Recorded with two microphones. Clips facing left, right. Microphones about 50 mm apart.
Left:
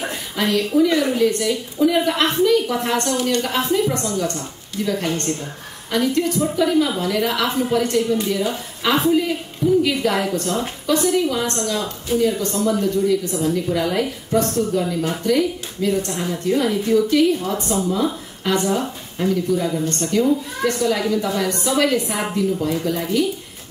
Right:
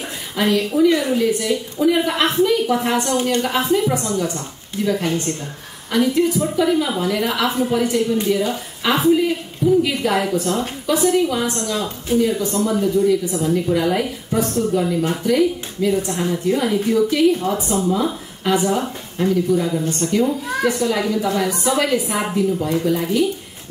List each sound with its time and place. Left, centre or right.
0.4 s speech: centre
3.1 s a woman's voice: right
3.3 s a woman's voice: centre